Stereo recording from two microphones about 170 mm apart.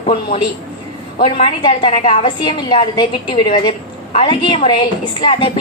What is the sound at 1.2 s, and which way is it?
A woman's voice, 30° left (ahead or behind).